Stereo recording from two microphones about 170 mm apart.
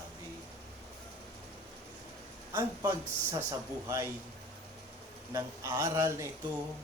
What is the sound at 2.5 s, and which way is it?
Speech, 15° right (ahead or behind).